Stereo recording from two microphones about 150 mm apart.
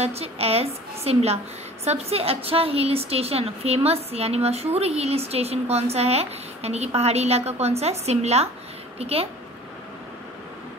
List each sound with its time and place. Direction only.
0.0 s a woman's voice: 45° right (ahead or behind)